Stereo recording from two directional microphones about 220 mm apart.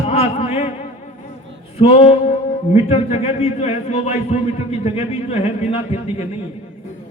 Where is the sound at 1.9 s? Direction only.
25° left (ahead or behind).